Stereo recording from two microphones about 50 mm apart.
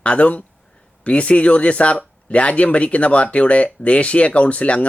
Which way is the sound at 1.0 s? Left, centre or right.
Left.